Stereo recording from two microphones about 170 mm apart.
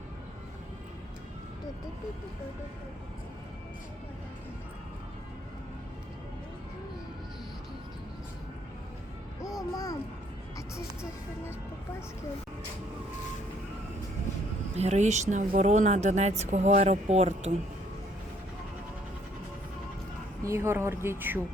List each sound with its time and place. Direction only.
9.7 s a child's voice: 20° left (ahead or behind)
14.8 s speech: 40° right (ahead or behind)
20.4 s speech: 15° right (ahead or behind)